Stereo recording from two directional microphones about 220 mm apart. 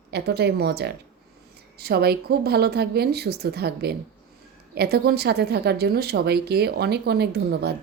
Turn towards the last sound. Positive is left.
turn(degrees=-45)  # may be behind; listen again after turning